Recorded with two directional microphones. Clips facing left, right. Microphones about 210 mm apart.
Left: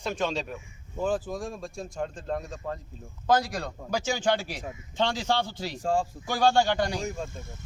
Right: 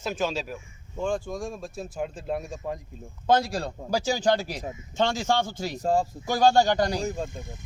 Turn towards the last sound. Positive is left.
turn(degrees=-35)  # may be behind; listen again after turning